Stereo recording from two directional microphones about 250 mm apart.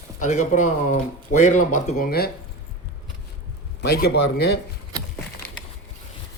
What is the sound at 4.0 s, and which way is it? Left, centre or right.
Speech, left.